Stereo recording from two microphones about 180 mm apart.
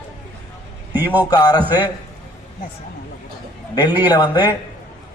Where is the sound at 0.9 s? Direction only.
10° right (ahead or behind).